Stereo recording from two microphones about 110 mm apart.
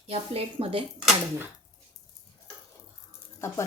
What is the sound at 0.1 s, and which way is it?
Speech, 65° right (ahead or behind).